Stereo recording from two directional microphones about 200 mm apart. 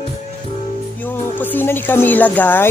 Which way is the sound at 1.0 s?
10° left (ahead or behind).